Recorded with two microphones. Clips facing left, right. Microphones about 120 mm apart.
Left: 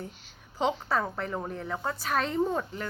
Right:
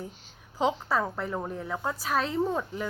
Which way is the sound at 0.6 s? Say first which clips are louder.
Right 1 dB; 5° right (ahead or behind).